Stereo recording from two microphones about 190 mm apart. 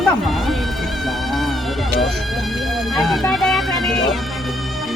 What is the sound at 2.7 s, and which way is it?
Music, centre (ahead or behind).